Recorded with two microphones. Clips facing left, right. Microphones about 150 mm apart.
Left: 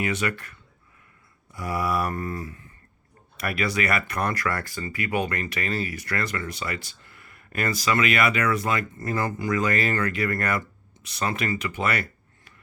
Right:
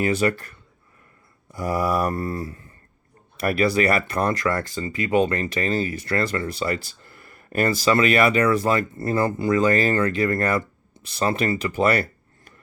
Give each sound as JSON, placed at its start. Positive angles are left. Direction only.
{"t": 0.0, "sound": "speech", "side_deg": -35}
{"t": 1.5, "sound": "speech", "side_deg": -35}